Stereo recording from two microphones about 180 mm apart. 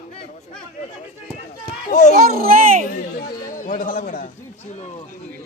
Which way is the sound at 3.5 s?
50° left (ahead or behind).